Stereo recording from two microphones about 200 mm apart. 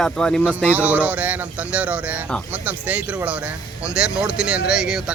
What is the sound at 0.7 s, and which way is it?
Speech, 10° right (ahead or behind).